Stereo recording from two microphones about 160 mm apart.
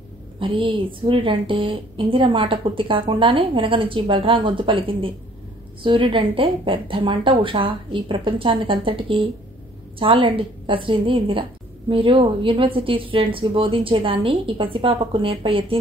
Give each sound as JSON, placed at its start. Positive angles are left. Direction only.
{"t": 0.4, "sound": "a woman's voice", "side_deg": -35}